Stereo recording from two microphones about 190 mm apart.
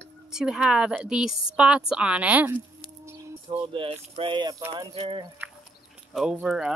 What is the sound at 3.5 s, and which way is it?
Speech, 25° right (ahead or behind).